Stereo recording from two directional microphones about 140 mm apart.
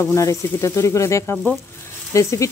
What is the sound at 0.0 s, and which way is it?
Speech, 20° left (ahead or behind).